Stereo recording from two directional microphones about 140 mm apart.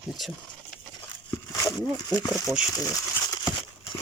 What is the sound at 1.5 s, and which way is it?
Speech, 25° left (ahead or behind).